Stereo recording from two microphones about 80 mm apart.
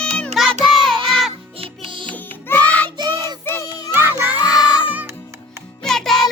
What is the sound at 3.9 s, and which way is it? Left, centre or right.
Crowd, right.